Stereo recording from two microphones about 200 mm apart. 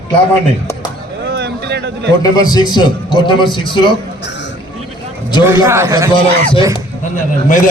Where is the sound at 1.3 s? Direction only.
55° right (ahead or behind).